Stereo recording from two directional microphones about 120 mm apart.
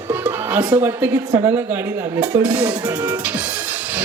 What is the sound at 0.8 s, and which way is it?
Speech, 20° right (ahead or behind).